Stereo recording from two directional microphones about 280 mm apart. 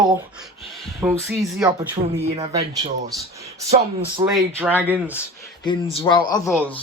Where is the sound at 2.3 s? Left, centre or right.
Right.